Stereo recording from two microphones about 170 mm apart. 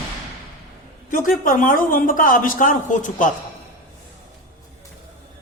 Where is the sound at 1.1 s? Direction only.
55° left (ahead or behind).